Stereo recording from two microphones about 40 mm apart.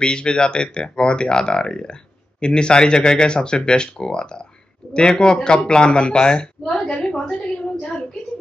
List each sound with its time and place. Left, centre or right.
0.0 s speech: left